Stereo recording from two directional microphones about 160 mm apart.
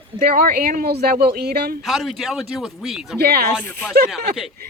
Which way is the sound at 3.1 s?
80° right.